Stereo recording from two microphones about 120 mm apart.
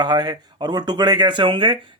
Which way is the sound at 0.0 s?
40° right (ahead or behind).